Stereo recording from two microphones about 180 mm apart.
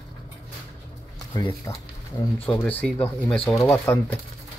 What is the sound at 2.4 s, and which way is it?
Speech, 10° left (ahead or behind).